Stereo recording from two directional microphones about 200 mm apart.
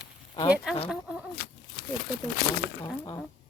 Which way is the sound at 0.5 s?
5° right (ahead or behind).